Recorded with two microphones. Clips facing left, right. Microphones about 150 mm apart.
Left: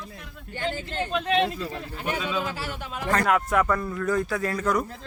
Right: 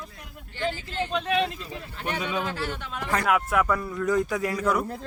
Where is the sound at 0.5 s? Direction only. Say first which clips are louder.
Even; 50° left (ahead or behind).